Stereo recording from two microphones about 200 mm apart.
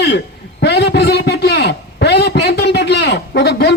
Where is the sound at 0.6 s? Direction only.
55° left (ahead or behind).